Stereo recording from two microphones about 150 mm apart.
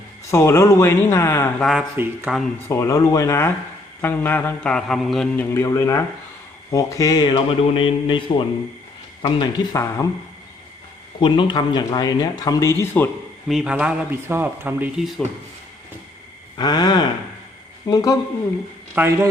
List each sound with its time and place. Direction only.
0.3 s speech: 20° left (ahead or behind)
2.0 s speech: 15° right (ahead or behind)
2.6 s speech: 20° left (ahead or behind); by 5.3 s centre (ahead or behind)
5.4 s speech: 20° left (ahead or behind)
11.2 s speech: 30° left (ahead or behind); by 13.1 s 15° left (ahead or behind)
13.5 s speech: 5° right (ahead or behind)
16.6 s speech: 30° left (ahead or behind)
18.9 s speech: 15° right (ahead or behind)